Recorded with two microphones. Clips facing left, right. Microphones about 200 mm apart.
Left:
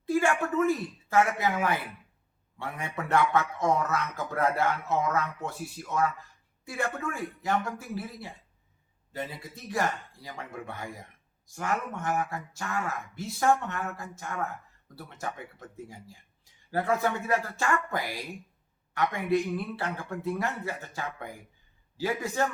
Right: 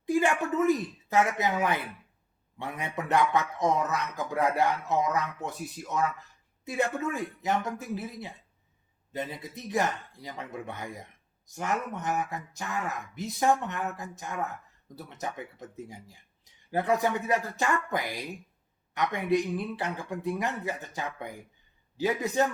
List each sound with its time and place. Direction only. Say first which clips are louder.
0.0 s a man's voice: even; 15° right (ahead or behind)